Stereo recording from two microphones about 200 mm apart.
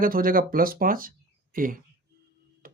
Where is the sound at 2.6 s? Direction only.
45° right (ahead or behind).